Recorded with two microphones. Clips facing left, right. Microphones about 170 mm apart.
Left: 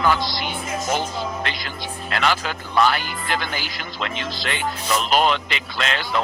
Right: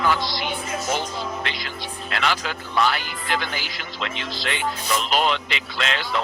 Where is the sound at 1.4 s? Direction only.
45° left (ahead or behind).